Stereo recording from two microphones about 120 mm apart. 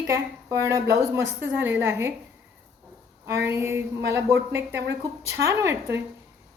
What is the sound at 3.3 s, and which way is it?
A woman's voice, 20° right (ahead or behind).